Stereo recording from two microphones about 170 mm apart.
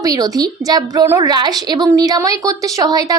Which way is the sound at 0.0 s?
20° right (ahead or behind).